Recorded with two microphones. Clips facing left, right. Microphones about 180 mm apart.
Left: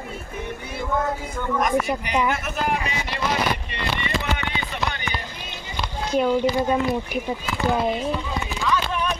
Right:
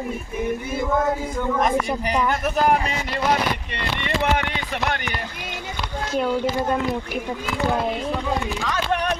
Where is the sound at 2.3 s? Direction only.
40° right (ahead or behind).